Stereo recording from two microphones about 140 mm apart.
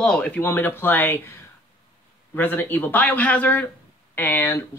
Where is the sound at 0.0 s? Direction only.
5° left (ahead or behind).